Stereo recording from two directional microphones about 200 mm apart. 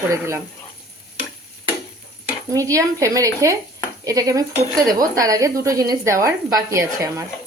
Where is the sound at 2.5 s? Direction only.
15° right (ahead or behind).